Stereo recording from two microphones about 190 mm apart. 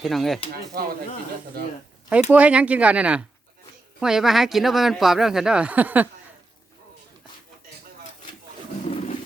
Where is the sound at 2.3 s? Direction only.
5° right (ahead or behind).